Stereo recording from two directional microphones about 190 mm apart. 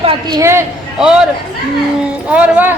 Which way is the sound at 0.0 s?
25° right (ahead or behind).